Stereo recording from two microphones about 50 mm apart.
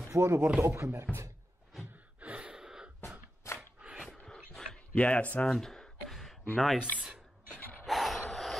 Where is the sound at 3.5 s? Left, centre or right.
Left.